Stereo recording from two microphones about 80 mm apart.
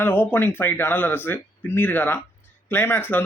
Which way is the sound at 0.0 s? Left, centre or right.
Left.